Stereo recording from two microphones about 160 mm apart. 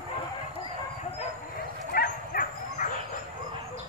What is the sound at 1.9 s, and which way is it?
Dog, 60° left (ahead or behind).